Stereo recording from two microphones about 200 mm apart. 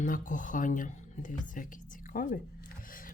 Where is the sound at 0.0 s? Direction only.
40° left (ahead or behind).